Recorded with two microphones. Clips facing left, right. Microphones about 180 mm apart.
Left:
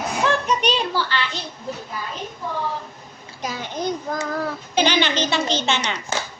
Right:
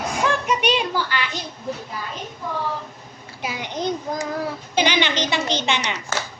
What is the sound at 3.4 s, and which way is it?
Child singing, 15° right (ahead or behind).